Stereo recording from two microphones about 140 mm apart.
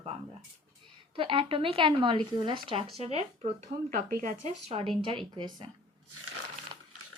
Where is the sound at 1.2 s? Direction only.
40° right (ahead or behind).